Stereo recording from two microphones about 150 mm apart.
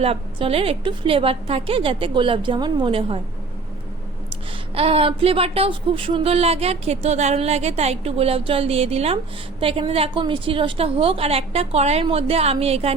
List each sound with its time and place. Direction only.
0.0 s speech: 40° right (ahead or behind)
4.7 s speech: 40° right (ahead or behind)